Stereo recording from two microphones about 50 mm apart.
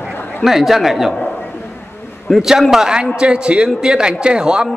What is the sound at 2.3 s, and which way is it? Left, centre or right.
Speech, centre.